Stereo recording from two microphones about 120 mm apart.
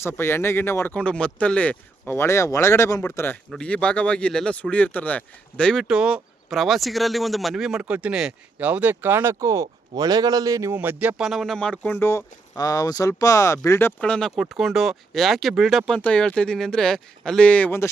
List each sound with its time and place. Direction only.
0.0 s speech: 20° left (ahead or behind)
3.5 s speech: 10° left (ahead or behind)
5.9 s speech: 5° right (ahead or behind); by 10.8 s 25° right (ahead or behind)
10.8 s speech: 10° right (ahead or behind)
11.3 s speech: centre (ahead or behind); by 12.2 s 20° left (ahead or behind)
12.5 s speech: 30° left (ahead or behind)
14.0 s speech: 5° left (ahead or behind)
16.0 s speech: 10° left (ahead or behind)